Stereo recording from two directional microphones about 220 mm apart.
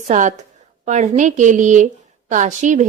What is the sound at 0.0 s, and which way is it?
A woman's voice, 35° right (ahead or behind).